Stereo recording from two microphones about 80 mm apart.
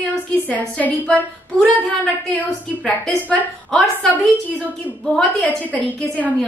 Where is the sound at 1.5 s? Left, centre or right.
Centre.